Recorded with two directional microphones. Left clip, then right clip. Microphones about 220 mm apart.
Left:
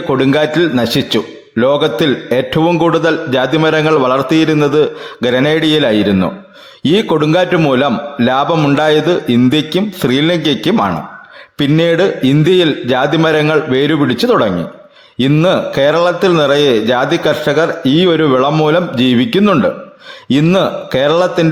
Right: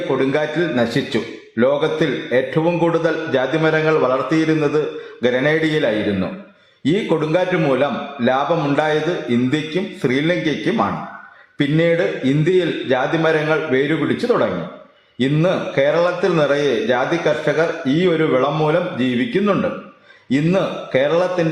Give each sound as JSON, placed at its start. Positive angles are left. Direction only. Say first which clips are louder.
{"t": 0.2, "sound": "a man's voice", "louder": "left 7 dB", "side_deg": 35}